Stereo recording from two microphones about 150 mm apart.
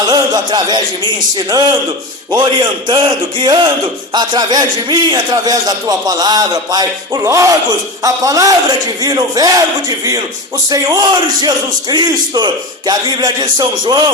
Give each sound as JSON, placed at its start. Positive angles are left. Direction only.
{"t": 0.1, "sound": "speech", "side_deg": -30}
{"t": 2.3, "sound": "a man's voice", "side_deg": -30}